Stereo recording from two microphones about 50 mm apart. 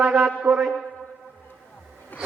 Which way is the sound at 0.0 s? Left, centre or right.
Right.